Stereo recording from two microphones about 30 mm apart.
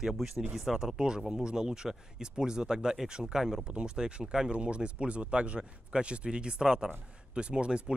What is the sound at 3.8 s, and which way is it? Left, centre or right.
Speech, right.